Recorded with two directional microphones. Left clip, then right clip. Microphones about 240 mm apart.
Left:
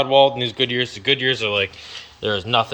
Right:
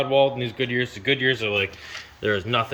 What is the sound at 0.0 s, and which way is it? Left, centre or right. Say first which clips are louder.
A man's voice: left 5 dB; centre.